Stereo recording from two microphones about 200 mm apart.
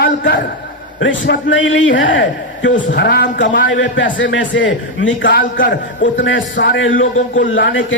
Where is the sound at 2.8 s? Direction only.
50° left (ahead or behind).